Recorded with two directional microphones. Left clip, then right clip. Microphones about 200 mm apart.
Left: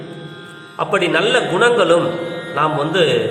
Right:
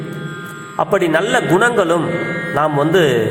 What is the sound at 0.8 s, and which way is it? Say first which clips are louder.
A man's voice: right 1 dB; 20° right (ahead or behind).